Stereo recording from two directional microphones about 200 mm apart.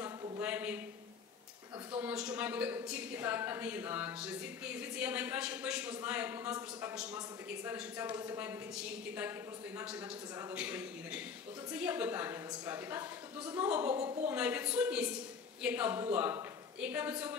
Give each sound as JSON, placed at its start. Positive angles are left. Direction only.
{"t": 0.4, "sound": "a woman's voice", "side_deg": -5}
{"t": 2.0, "sound": "a woman's voice", "side_deg": -5}
{"t": 10.5, "sound": "a woman's voice", "side_deg": -5}
{"t": 14.0, "sound": "a woman's voice", "side_deg": -30}
{"t": 14.3, "sound": "a woman's voice", "side_deg": -5}